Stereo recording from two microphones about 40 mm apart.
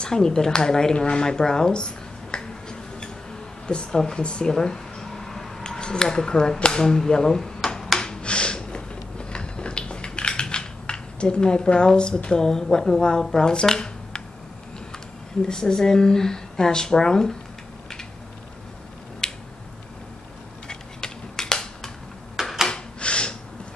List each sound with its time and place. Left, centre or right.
0.0 s speech: centre
1.0 s a sound: left
3.6 s speech: left
4.2 s a sound: left; by 5.5 s centre
5.6 s speech: left
8.0 s a sound: left
12.3 s speech: centre
15.4 s speech: centre
19.2 s finger snapping: centre
20.6 s mechanisms: centre
22.4 s a sound: centre
22.7 s gasp: left